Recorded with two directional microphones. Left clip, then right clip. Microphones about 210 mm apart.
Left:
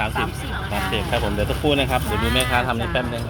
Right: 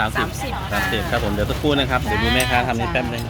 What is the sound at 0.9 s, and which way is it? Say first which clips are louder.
Speech: right 1 dB; 20° right (ahead or behind).